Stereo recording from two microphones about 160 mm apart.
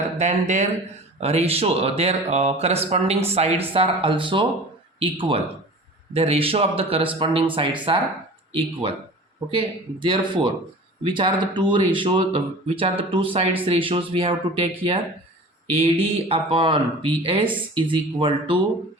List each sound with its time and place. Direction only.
0.2 s speech: 50° right (ahead or behind); by 18.5 s 30° right (ahead or behind)